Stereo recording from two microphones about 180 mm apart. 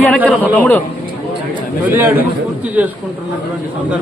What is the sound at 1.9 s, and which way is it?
A man's voice, 10° right (ahead or behind).